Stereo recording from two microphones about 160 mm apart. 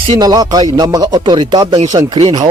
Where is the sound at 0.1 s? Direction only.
25° right (ahead or behind).